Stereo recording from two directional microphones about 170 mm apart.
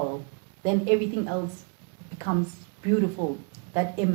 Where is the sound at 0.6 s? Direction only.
20° right (ahead or behind).